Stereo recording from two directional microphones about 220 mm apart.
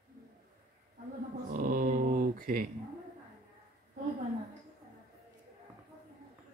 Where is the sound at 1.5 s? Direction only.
40° right (ahead or behind).